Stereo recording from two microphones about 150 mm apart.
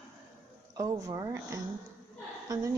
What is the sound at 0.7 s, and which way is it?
Speech, 20° right (ahead or behind).